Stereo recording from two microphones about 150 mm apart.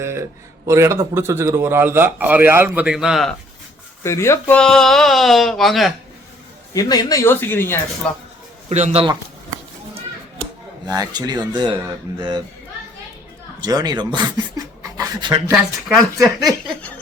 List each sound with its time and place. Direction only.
0.0 s a man's voice: 15° right (ahead or behind); by 3.3 s centre (ahead or behind)
4.0 s speech: 20° left (ahead or behind)
4.5 s speech: 5° left (ahead or behind)
6.7 s speech: 25° left (ahead or behind)
8.7 s speech: 45° right (ahead or behind)
10.8 s speech: 25° right (ahead or behind)
13.6 s speech: 25° right (ahead or behind)